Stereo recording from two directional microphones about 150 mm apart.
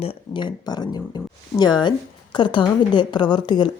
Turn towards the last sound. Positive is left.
turn(degrees=30)  # may be behind; listen again after turning